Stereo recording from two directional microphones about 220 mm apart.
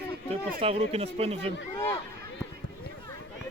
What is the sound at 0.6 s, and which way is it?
Speech, 25° right (ahead or behind).